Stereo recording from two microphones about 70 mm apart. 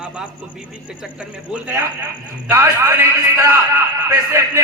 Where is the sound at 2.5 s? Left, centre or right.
Right.